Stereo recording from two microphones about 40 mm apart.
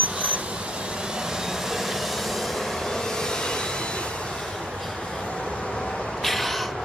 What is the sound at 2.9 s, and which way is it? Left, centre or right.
Vehicle, centre.